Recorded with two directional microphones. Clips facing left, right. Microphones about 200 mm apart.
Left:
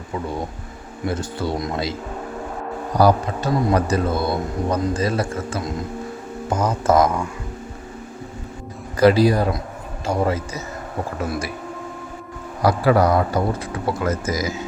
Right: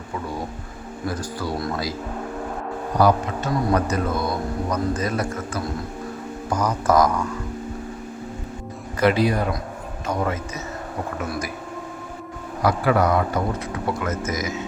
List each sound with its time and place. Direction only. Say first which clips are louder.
1.0 s speech: left 3 dB; 25° left (ahead or behind)
3.0 s speech: left 2 dB; 35° left (ahead or behind)
9.0 s a man's voice: left 5 dB; 35° left (ahead or behind)
12.6 s a man's voice: left 3 dB; 35° left (ahead or behind)